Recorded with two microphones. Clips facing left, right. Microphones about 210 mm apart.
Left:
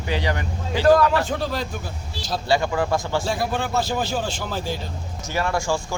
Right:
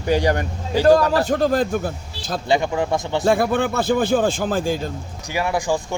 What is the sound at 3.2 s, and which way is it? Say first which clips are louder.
Speech: right 7 dB; 55° right (ahead or behind).